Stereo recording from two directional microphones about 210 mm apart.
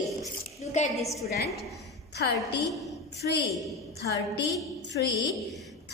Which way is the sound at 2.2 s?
50° left (ahead or behind).